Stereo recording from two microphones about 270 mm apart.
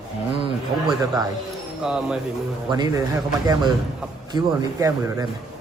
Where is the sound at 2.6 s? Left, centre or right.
Centre.